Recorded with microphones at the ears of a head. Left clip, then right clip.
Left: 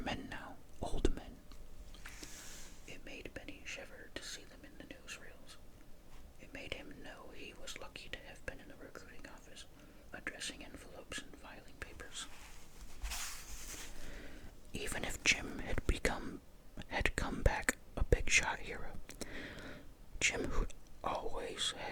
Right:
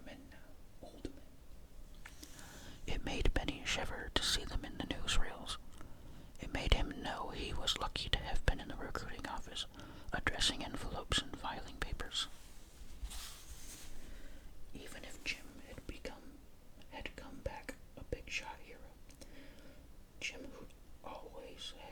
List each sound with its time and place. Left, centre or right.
0.0 s whispering: left
2.8 s whispering: right
13.1 s a sound: left
14.8 s whispering: left